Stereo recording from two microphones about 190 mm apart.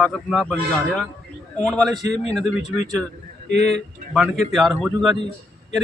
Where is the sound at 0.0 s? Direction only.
5° left (ahead or behind).